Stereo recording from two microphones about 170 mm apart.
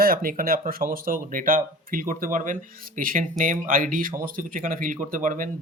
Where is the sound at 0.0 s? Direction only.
60° right (ahead or behind).